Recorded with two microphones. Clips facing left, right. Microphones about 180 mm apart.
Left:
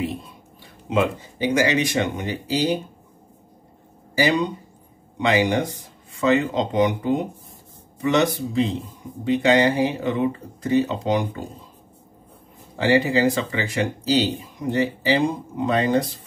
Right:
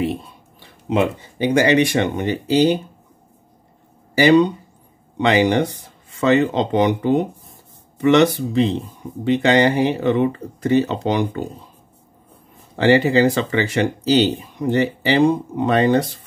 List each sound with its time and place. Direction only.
0.0 s speech: 65° right (ahead or behind)
4.2 s speech: 70° right (ahead or behind)
12.7 s speech: 65° right (ahead or behind)